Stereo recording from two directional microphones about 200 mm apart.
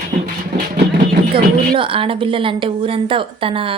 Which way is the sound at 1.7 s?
25° right (ahead or behind).